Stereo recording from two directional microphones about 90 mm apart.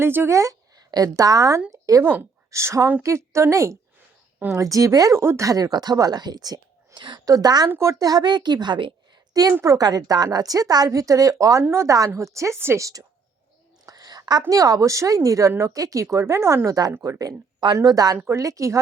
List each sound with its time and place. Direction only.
0.0 s speech: 25° right (ahead or behind)
0.9 s speech: 45° right (ahead or behind)
7.7 s speech: 35° right (ahead or behind); by 8.9 s 55° right (ahead or behind)
9.3 s a woman's voice: 45° right (ahead or behind)
13.8 s a sound: 45° right (ahead or behind)
14.5 s speech: 40° right (ahead or behind)
16.6 s speech: 45° right (ahead or behind)